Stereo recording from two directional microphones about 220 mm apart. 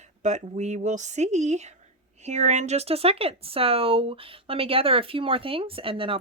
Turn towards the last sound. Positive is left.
turn(degrees=-25)  # may be behind; listen again after turning